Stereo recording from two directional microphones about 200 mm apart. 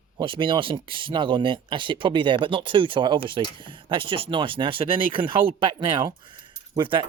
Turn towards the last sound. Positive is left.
turn(degrees=-25)  # may be behind; listen again after turning